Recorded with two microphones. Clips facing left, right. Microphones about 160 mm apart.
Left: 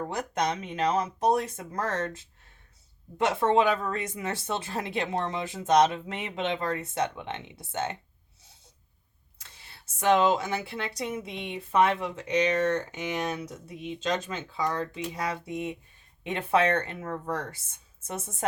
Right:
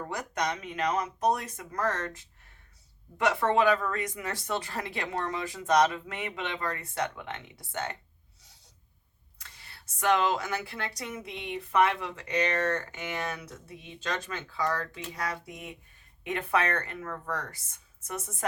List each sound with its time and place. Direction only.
0.0 s speech: 25° left (ahead or behind)
9.4 s speech: 25° left (ahead or behind)